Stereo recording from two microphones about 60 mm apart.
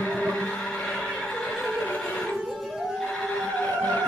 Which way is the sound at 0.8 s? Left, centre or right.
Centre.